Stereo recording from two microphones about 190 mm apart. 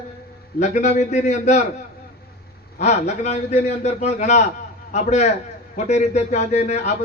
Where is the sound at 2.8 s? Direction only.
35° left (ahead or behind).